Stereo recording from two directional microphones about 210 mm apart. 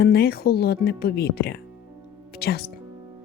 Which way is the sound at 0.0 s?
50° left (ahead or behind).